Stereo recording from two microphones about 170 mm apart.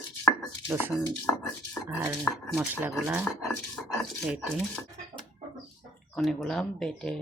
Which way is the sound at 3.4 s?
Centre (ahead or behind).